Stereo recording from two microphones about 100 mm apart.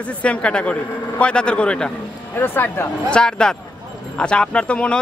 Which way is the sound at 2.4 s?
20° left (ahead or behind).